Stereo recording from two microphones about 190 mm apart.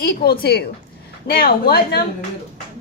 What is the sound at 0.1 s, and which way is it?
A woman's voice, 55° left (ahead or behind).